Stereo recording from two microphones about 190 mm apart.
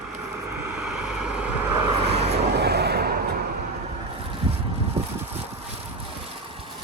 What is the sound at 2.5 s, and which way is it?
Vehicle, 60° right (ahead or behind).